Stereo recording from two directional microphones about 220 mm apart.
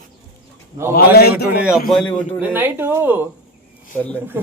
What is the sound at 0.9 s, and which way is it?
Speech, 45° left (ahead or behind).